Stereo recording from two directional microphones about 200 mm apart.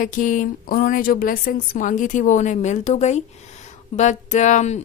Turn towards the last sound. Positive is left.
turn(degrees=35)  # may be behind; listen again after turning